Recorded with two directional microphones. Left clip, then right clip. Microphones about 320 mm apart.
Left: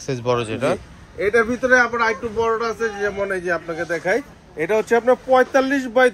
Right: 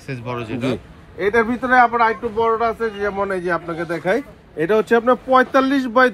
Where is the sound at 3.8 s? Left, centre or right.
Right.